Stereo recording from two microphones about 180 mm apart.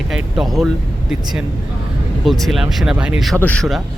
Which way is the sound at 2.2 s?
Centre (ahead or behind).